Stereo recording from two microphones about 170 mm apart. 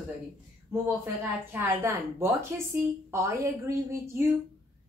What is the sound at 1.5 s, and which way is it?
A woman's voice, 15° right (ahead or behind).